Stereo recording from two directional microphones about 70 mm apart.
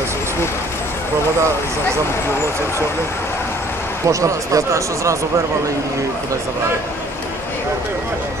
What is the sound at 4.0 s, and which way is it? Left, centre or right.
Speech, right.